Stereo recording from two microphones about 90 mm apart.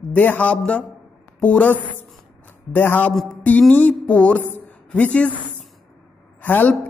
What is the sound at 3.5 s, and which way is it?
Music, 15° left (ahead or behind).